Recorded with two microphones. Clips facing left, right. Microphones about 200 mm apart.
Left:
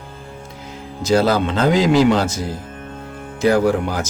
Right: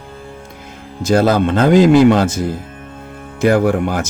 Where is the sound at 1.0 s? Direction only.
50° right (ahead or behind).